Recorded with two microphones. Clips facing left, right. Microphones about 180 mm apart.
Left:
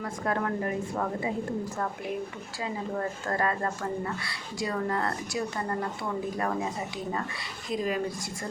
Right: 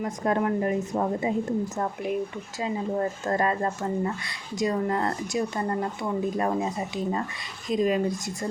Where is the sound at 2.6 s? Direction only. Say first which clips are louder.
Right 5 dB; 25° right (ahead or behind).